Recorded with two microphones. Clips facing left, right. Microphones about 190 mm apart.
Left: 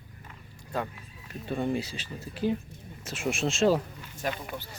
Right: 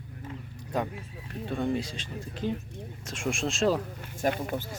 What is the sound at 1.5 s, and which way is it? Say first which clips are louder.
Speech: even; 5° left (ahead or behind).